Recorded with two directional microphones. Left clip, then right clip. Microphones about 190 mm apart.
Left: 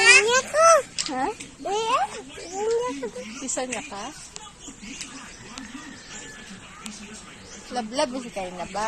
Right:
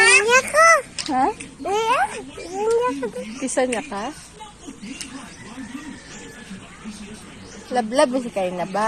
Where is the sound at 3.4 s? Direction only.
40° right (ahead or behind).